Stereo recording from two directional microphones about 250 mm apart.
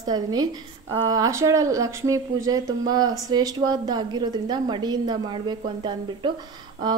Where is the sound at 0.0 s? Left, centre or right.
Centre.